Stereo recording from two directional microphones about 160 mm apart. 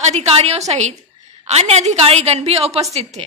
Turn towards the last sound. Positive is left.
turn(degrees=-40)  # may be behind; listen again after turning